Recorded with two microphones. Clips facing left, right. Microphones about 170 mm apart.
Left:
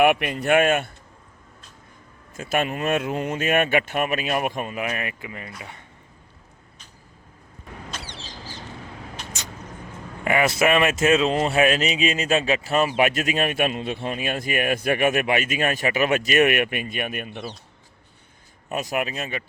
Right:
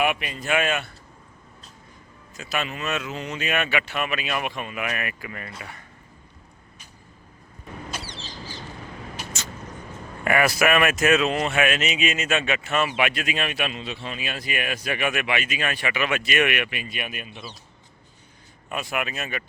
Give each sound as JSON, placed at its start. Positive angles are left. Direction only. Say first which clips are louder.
{"t": 0.0, "sound": "speech", "louder": "left 6 dB", "side_deg": 60}
{"t": 2.3, "sound": "speech", "louder": "left 5 dB", "side_deg": 50}
{"t": 7.9, "sound": "bird", "louder": "right 1 dB", "side_deg": -10}
{"t": 10.2, "sound": "speech", "louder": "left 1 dB", "side_deg": 20}
{"t": 18.7, "sound": "speech", "louder": "left 3 dB", "side_deg": 40}